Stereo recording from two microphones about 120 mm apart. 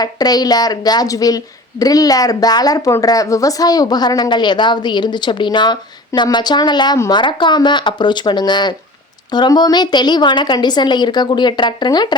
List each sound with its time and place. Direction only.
0.0 s a woman's voice: 35° left (ahead or behind)